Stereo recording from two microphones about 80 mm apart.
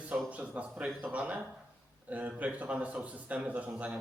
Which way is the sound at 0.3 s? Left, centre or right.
Centre.